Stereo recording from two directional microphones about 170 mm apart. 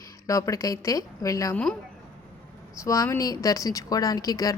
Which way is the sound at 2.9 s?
20° left (ahead or behind).